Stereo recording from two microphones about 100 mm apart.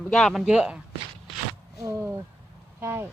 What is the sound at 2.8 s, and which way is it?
Speech, 25° right (ahead or behind).